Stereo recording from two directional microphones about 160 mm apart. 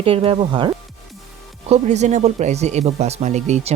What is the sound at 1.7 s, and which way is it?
Speech, 45° right (ahead or behind).